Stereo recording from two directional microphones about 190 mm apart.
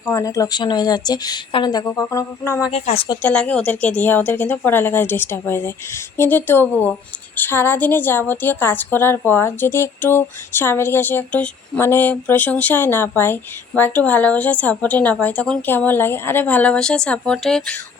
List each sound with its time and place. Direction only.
0.1 s a woman's voice: 15° left (ahead or behind)
2.7 s a woman's voice: 30° left (ahead or behind)
3.2 s a woman's voice: 5° left (ahead or behind)